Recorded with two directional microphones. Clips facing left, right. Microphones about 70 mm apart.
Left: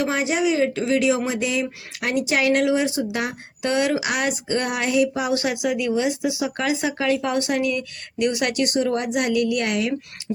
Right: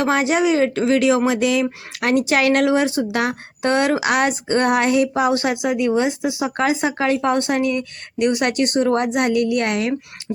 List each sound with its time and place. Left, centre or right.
0.0 s speech: right
2.0 s speech: right
3.6 s speech: right